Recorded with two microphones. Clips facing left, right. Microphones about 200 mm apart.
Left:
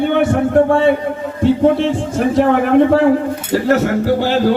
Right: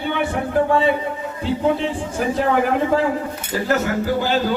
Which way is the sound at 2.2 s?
60° left (ahead or behind).